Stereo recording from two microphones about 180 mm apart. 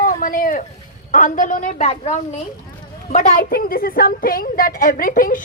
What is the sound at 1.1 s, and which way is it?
A woman's voice, 45° left (ahead or behind).